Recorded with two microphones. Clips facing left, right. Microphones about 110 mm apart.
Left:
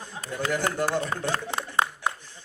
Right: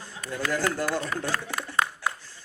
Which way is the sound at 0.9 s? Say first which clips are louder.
Left 2 dB; 25° left (ahead or behind).